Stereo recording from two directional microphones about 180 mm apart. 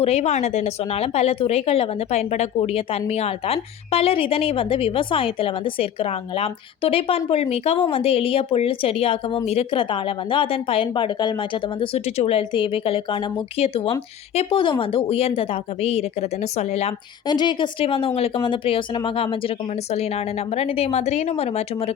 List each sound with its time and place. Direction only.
0.0 s a woman's voice: 35° left (ahead or behind)
17.2 s a woman's voice: 25° left (ahead or behind)